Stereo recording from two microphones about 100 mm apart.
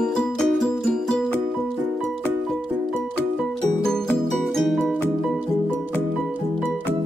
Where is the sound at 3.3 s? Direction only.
5° left (ahead or behind).